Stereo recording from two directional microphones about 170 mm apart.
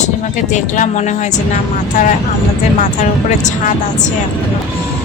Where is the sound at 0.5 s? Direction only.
45° left (ahead or behind).